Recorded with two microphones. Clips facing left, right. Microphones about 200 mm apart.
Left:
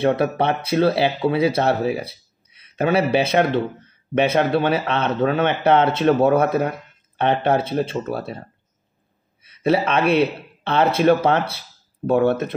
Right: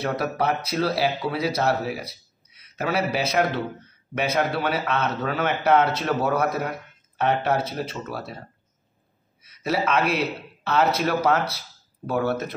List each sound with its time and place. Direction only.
0.0 s speech: 25° left (ahead or behind)
9.5 s speech: 30° left (ahead or behind)